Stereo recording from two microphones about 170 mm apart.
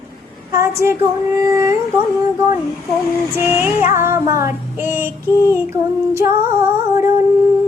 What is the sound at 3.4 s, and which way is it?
Child singing, 15° right (ahead or behind).